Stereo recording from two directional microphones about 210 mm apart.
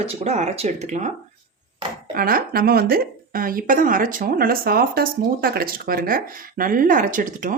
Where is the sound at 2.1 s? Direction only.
45° right (ahead or behind).